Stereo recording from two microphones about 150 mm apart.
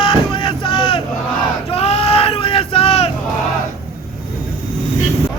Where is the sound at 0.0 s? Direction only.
35° left (ahead or behind).